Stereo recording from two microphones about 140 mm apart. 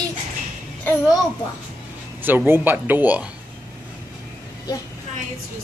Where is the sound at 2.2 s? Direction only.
15° right (ahead or behind).